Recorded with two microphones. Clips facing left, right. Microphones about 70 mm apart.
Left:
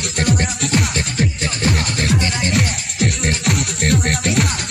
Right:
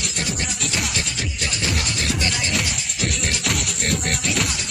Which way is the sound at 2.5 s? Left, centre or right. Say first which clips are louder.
Left 5 dB; left.